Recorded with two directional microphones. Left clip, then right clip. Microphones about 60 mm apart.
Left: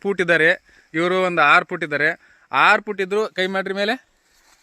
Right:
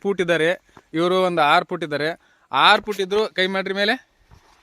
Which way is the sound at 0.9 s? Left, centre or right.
Right.